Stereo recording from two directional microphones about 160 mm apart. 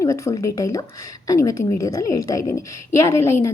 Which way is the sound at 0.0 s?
20° left (ahead or behind).